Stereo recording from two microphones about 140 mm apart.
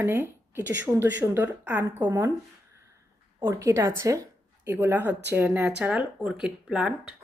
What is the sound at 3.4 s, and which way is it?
A woman's voice, 20° right (ahead or behind).